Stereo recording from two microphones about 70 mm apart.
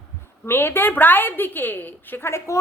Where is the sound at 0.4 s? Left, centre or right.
Left.